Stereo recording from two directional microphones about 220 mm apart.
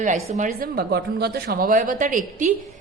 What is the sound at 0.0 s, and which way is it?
A woman's voice, 35° right (ahead or behind).